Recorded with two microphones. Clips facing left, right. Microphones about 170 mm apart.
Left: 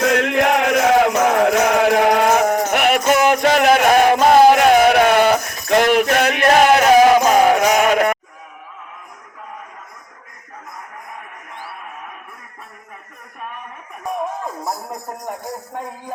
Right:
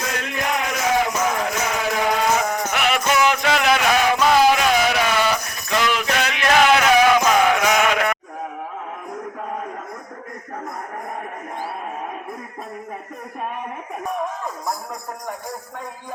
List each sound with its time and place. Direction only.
0.0 s music: 70° left (ahead or behind); by 8.1 s 40° left (ahead or behind)